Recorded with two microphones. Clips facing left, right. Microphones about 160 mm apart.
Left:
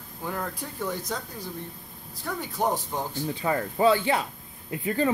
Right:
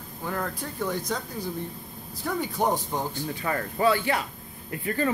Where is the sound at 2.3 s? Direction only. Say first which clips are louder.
Right 4 dB; 5° right (ahead or behind).